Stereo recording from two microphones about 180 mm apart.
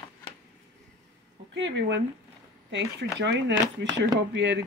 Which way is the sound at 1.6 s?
80° right.